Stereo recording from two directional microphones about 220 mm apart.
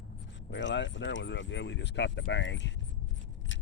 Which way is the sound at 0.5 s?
55° left (ahead or behind).